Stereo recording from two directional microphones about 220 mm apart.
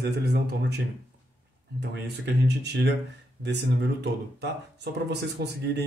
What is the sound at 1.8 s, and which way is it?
Speech, 50° right (ahead or behind).